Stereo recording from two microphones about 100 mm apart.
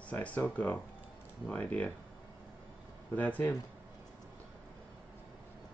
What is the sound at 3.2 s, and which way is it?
Speech, 15° left (ahead or behind).